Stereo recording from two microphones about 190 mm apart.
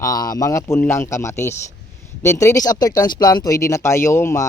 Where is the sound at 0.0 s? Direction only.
20° left (ahead or behind).